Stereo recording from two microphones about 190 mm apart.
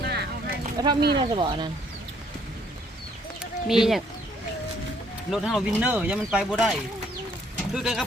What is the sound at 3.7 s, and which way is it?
Speech, centre (ahead or behind).